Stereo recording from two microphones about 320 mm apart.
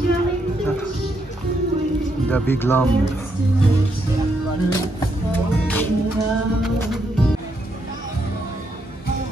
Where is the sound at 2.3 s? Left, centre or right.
Centre.